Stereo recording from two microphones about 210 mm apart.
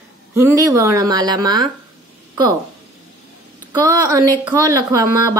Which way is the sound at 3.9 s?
20° right (ahead or behind).